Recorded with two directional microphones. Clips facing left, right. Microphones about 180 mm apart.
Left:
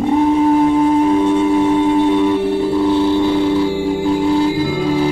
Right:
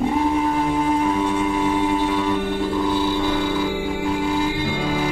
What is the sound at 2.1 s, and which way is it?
Music, 30° left (ahead or behind).